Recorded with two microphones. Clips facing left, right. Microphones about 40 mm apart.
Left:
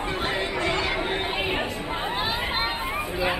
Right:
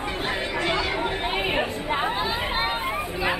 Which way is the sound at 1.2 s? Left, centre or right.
Right.